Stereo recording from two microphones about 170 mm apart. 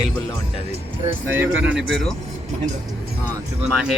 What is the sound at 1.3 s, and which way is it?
Speech, 10° right (ahead or behind).